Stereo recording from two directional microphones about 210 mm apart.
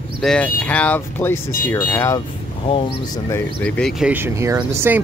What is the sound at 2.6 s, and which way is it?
Speech, 25° left (ahead or behind).